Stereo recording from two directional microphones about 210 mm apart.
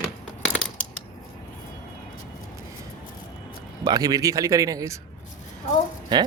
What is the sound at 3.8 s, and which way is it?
A man's voice, 20° right (ahead or behind).